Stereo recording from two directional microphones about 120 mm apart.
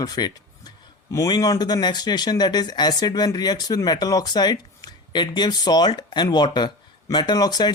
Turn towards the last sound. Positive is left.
turn(degrees=35)  # may be behind; listen again after turning